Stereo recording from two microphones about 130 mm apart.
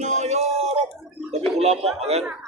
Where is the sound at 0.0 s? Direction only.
60° right (ahead or behind).